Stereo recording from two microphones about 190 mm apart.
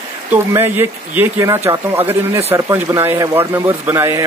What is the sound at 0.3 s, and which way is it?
Speech, 10° right (ahead or behind).